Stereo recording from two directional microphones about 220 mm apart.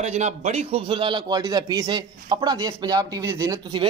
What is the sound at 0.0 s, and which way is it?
A man's voice, 30° right (ahead or behind).